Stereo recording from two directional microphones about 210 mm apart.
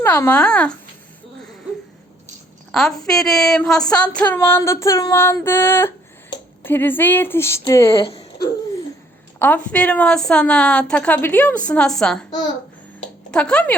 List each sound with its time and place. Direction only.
0.0 s a woman's voice: 10° left (ahead or behind)
2.7 s a woman's voice: centre (ahead or behind)
4.3 s female singing: 10° left (ahead or behind)
7.9 s speech: 25° left (ahead or behind)
9.4 s a woman's voice: 5° left (ahead or behind)
13.3 s a woman's voice: 5° left (ahead or behind)